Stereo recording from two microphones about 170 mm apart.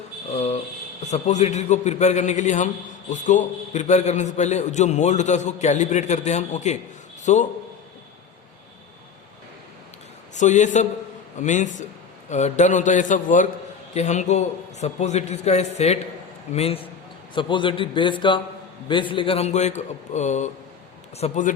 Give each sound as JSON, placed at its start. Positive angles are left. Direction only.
{"t": 0.3, "sound": "a man's voice", "side_deg": 40}
{"t": 10.3, "sound": "a man's voice", "side_deg": 45}